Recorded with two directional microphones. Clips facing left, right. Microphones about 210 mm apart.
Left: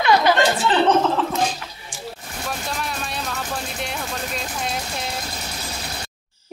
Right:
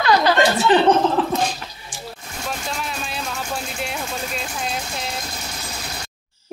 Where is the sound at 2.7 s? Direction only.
Centre (ahead or behind).